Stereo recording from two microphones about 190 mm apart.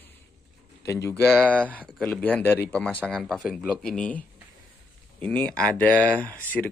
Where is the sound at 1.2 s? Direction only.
Centre (ahead or behind).